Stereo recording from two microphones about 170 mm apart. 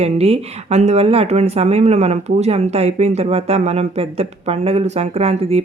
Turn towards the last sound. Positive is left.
turn(degrees=-35)  # may be behind; listen again after turning